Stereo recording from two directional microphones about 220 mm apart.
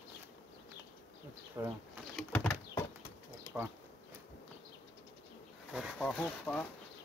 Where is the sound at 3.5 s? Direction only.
15° left (ahead or behind).